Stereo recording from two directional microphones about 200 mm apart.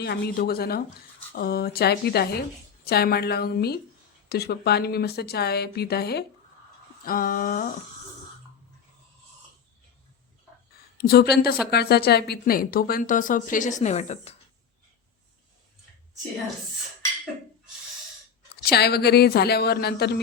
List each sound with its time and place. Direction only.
0.0 s a woman's voice: 50° left (ahead or behind)
11.0 s a woman's voice: 50° left (ahead or behind); by 14.3 s 35° left (ahead or behind)
18.5 s a woman's voice: 50° left (ahead or behind)